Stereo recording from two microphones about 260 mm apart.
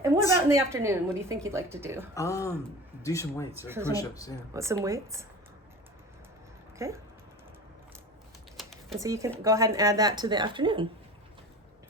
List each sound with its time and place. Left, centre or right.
0.0 s a woman's voice: centre
2.1 s speech: centre
3.5 s a woman's voice: centre
3.9 s speech: centre
4.5 s a woman's voice: centre
6.7 s speech: centre
8.6 s typing: centre
9.0 s a woman's voice: centre